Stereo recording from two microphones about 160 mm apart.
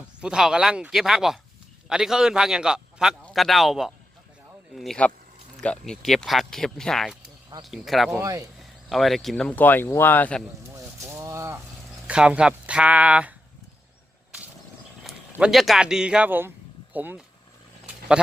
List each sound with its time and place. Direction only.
0.2 s speech: 5° right (ahead or behind)
8.2 s speech: 20° right (ahead or behind)
8.9 s speech: centre (ahead or behind)
10.8 s a sound: 20° right (ahead or behind)
12.0 s speech: 5° right (ahead or behind)
15.4 s speech: 5° right (ahead or behind)